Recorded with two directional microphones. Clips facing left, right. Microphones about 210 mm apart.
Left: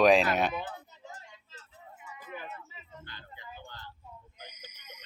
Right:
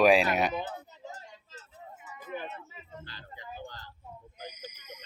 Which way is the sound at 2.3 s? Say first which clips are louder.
Right 5 dB; 25° right (ahead or behind).